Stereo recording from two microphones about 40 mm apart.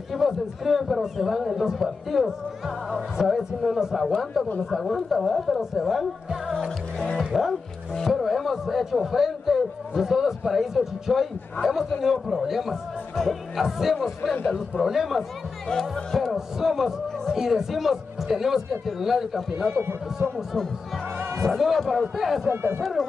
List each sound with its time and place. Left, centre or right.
0.1 s a man's voice: centre
3.3 s a man's voice: centre
15.7 s speech: centre
16.3 s speech: centre
21.5 s a man's voice: centre
22.5 s speech: right
22.8 s a man's voice: centre